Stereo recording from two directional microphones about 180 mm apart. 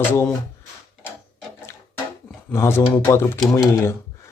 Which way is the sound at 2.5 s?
15° left (ahead or behind).